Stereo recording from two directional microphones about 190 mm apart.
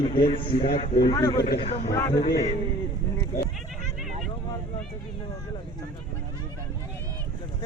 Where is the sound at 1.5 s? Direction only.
30° left (ahead or behind).